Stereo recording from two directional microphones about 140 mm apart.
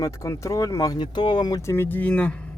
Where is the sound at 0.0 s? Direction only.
20° left (ahead or behind).